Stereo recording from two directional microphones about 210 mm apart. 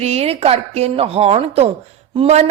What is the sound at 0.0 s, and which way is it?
A woman's voice, 30° right (ahead or behind).